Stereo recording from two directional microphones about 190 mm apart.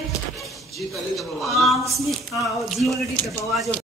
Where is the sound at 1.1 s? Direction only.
Centre (ahead or behind).